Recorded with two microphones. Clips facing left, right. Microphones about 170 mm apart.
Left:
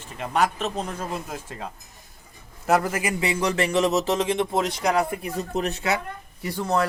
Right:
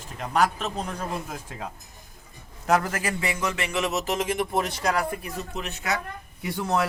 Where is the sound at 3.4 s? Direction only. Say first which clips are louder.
Left 7 dB; 35° left (ahead or behind).